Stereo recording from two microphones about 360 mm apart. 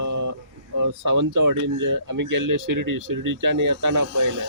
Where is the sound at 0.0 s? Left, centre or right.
Right.